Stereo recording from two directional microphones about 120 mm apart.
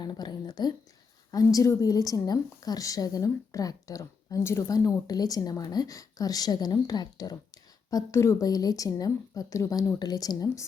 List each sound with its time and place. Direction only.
0.0 s a woman's voice: 35° left (ahead or behind)